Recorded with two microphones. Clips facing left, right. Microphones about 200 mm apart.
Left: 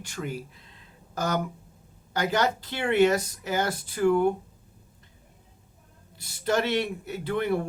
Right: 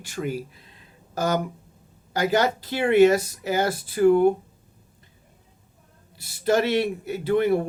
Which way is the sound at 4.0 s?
35° right (ahead or behind).